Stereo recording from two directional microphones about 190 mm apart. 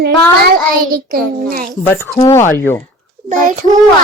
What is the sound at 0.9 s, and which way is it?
Speech, 50° right (ahead or behind).